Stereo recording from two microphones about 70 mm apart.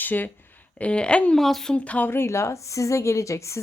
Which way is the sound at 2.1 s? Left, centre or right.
Left.